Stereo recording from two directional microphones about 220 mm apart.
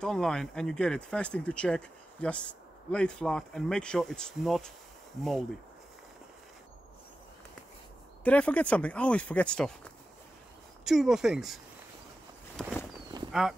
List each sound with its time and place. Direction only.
0.0 s speech: 5° left (ahead or behind)
8.2 s speech: 5° left (ahead or behind)